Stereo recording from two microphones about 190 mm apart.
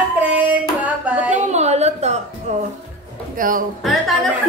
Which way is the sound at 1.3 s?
35° right (ahead or behind).